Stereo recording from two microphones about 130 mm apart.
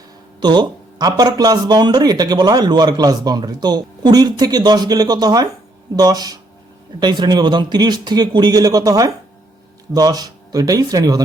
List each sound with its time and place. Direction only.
0.3 s speech: 35° right (ahead or behind)